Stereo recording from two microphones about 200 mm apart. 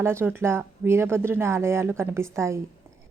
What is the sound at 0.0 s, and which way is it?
A woman's voice, 10° right (ahead or behind).